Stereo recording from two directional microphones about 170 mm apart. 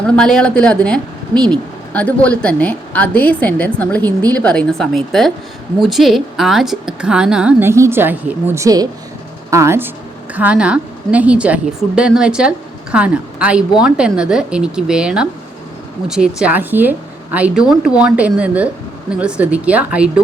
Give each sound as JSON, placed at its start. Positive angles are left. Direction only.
{"t": 0.0, "sound": "a woman's voice", "side_deg": 5}